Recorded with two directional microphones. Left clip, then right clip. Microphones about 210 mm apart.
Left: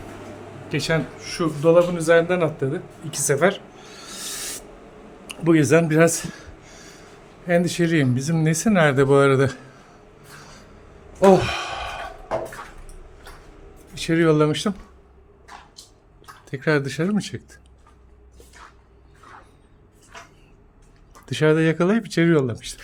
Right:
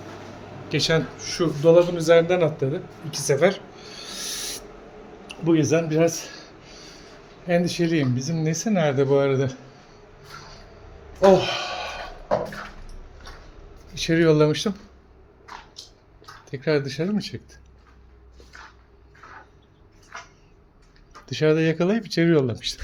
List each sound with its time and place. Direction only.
0.7 s a man's voice: 5° left (ahead or behind)
5.3 s a sound: 25° left (ahead or behind)
5.7 s speech: 30° left (ahead or behind)
6.3 s a sound: 20° left (ahead or behind)
7.4 s speech: 20° left (ahead or behind)
11.2 s gasp: 20° left (ahead or behind)
13.9 s speech: 10° left (ahead or behind)
16.5 s speech: 20° left (ahead or behind)
21.2 s speech: 20° left (ahead or behind); by 22.8 s 5° left (ahead or behind)